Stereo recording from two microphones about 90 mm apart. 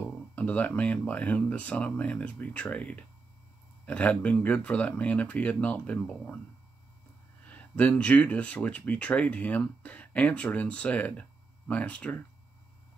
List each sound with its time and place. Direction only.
0.0 s speech: 15° left (ahead or behind)
7.4 s speech: 15° left (ahead or behind)